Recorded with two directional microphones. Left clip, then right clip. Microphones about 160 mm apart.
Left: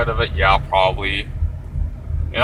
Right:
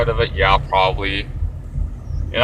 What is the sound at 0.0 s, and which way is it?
Speech, 25° right (ahead or behind).